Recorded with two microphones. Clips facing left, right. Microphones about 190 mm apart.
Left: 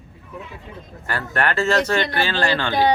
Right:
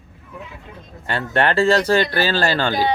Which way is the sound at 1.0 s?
25° right (ahead or behind).